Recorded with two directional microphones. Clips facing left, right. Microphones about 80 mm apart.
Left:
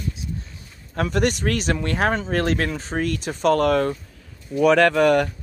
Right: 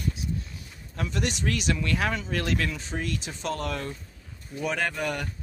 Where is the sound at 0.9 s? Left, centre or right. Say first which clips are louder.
Left 9 dB; left.